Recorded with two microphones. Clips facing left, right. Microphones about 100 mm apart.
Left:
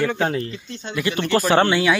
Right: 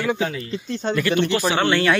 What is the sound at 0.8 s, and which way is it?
Speech, 45° right (ahead or behind).